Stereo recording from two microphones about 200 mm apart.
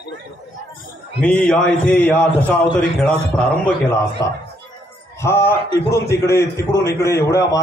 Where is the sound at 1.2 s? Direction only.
5° left (ahead or behind).